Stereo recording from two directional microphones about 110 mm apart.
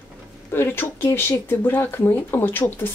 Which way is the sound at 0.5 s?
20° left (ahead or behind).